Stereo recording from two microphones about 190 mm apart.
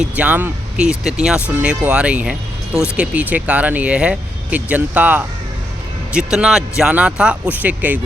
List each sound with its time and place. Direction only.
0.0 s speech: 10° right (ahead or behind)